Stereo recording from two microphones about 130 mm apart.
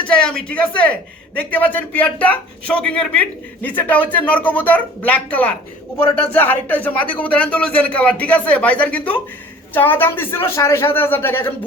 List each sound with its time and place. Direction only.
0.1 s a man's voice: 10° left (ahead or behind)